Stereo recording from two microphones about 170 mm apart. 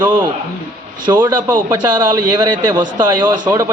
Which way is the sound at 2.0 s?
25° right (ahead or behind).